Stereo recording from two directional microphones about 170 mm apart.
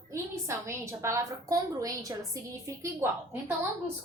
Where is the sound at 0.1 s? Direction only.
15° right (ahead or behind).